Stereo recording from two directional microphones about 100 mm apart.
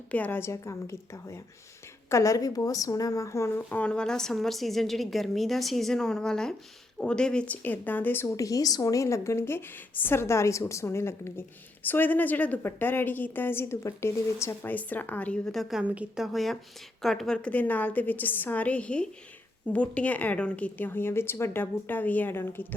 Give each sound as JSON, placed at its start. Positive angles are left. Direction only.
{"t": 0.1, "sound": "a woman's voice", "side_deg": 20}
{"t": 8.4, "sound": "a woman's voice", "side_deg": 35}
{"t": 15.7, "sound": "a woman's voice", "side_deg": -15}
{"t": 16.2, "sound": "a woman's voice", "side_deg": 0}